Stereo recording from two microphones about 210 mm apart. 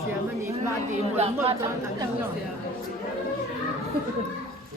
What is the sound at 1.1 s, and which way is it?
Speech, 30° right (ahead or behind).